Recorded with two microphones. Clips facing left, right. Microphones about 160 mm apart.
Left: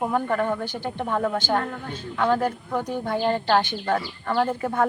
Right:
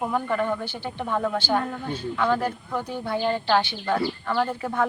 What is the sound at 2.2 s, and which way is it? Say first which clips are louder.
Speech: left 3 dB; 10° left (ahead or behind).